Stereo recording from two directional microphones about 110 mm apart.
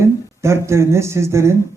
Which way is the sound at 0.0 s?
25° right (ahead or behind).